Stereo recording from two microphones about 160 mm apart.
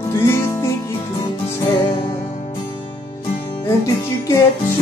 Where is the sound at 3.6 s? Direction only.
20° left (ahead or behind).